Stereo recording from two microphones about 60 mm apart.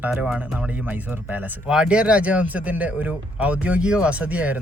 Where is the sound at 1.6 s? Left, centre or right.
Centre.